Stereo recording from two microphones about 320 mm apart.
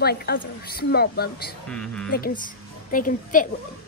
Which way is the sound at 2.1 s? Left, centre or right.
Left.